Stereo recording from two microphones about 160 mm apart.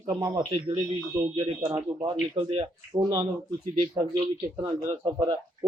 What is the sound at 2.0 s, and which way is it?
Speech, 35° right (ahead or behind).